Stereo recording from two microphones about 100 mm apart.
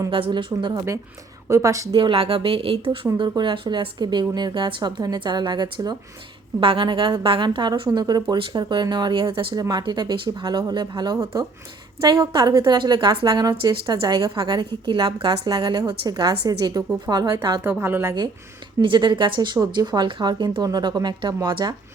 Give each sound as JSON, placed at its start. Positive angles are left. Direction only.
{"t": 0.1, "sound": "speech", "side_deg": -55}
{"t": 1.5, "sound": "a woman's voice", "side_deg": -30}
{"t": 1.9, "sound": "a woman's voice", "side_deg": -60}
{"t": 3.2, "sound": "a woman's voice", "side_deg": -50}
{"t": 17.6, "sound": "speech", "side_deg": -25}
{"t": 18.8, "sound": "speech", "side_deg": -55}